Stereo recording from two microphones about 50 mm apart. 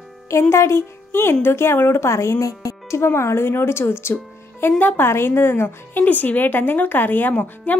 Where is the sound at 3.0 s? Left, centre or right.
Left.